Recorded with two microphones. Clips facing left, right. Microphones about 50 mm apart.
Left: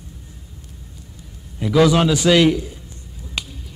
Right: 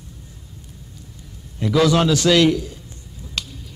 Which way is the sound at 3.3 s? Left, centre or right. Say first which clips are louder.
Left 1 dB; centre.